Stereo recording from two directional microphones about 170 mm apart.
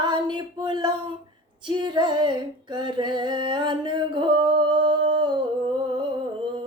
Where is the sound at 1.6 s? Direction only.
25° right (ahead or behind).